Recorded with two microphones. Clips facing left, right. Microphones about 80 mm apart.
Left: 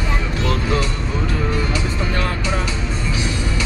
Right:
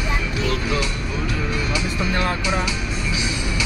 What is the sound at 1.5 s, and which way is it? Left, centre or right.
Music, left.